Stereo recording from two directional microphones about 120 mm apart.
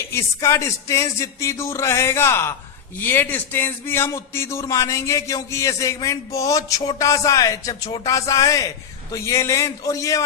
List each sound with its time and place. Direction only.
0.3 s a man's voice: 25° left (ahead or behind)